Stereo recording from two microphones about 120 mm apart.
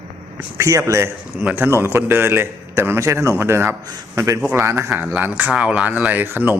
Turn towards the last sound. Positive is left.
turn(degrees=-15)  # may be behind; listen again after turning